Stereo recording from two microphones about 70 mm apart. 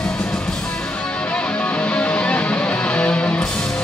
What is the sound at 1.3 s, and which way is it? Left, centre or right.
Music, centre.